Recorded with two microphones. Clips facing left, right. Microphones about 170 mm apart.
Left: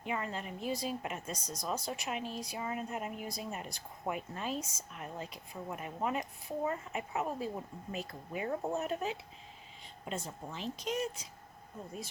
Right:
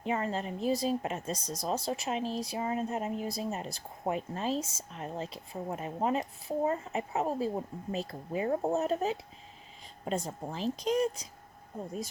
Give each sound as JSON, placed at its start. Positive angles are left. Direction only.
{"t": 0.0, "sound": "speech", "side_deg": -35}